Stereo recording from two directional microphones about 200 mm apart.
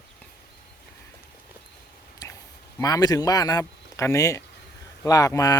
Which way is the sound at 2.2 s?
20° left (ahead or behind).